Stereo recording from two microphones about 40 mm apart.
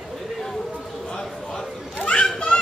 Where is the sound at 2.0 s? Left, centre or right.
Left.